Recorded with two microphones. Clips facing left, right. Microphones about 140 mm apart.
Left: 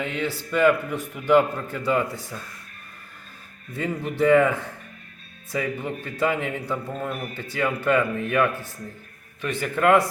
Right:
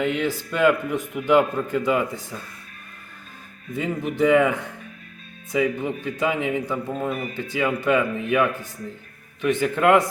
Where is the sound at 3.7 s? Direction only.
15° right (ahead or behind).